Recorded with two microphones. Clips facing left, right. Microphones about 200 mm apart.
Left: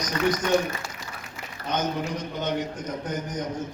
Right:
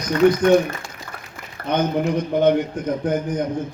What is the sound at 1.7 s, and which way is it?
A man's voice, 55° right (ahead or behind).